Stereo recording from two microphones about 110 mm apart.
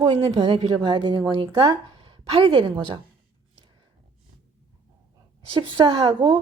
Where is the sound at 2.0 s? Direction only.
55° right (ahead or behind).